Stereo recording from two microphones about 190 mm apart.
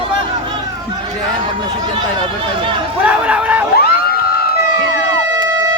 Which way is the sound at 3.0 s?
5° right (ahead or behind).